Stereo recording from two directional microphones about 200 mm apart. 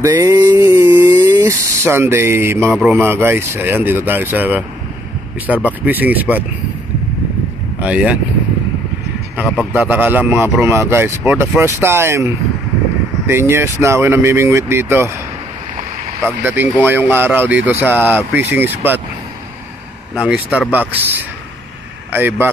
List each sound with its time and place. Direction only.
0.0 s a sound: 15° right (ahead or behind)
2.7 s a man's voice: 5° right (ahead or behind)
7.8 s speech: 5° right (ahead or behind)
9.8 s a man's voice: 10° right (ahead or behind)
13.3 s a man's voice: 10° right (ahead or behind)
16.3 s a man's voice: 10° right (ahead or behind)
20.2 s speech: 5° right (ahead or behind)
22.1 s a man's voice: 10° right (ahead or behind)